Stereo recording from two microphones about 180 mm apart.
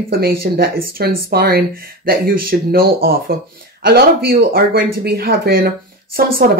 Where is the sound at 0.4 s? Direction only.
55° right (ahead or behind).